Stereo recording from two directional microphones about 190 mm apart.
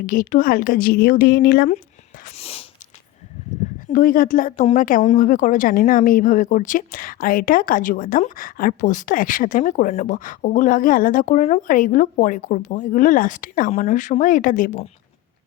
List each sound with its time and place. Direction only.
0.0 s speech: 45° left (ahead or behind)
2.2 s a sound: 30° left (ahead or behind)
3.9 s speech: 45° left (ahead or behind)